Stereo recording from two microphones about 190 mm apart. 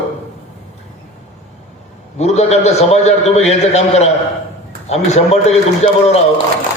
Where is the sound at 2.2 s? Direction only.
35° left (ahead or behind).